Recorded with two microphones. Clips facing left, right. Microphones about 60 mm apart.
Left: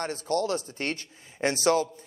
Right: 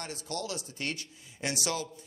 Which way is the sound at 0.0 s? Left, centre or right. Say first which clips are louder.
Left 10 dB; left.